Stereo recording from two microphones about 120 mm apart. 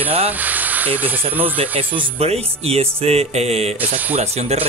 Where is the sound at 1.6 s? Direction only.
50° right (ahead or behind).